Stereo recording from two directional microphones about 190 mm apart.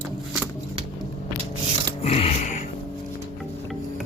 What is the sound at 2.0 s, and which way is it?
Music, 35° left (ahead or behind).